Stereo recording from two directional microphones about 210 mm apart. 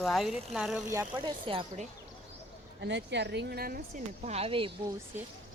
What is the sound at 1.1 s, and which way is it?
Speech, 25° right (ahead or behind).